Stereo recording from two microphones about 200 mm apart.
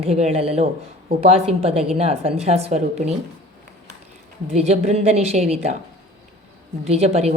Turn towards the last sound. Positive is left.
turn(degrees=-30)  # may be behind; listen again after turning